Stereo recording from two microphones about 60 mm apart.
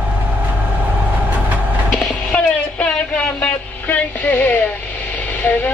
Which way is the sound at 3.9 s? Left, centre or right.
Left.